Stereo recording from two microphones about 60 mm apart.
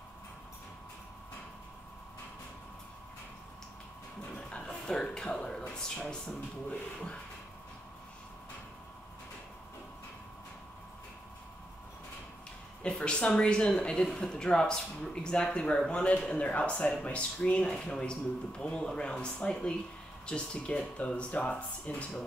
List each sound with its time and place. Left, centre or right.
4.4 s music: centre
6.7 s speech: centre
12.8 s speech: centre